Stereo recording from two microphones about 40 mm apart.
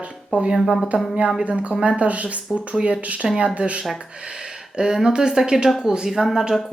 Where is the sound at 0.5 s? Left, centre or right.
Centre.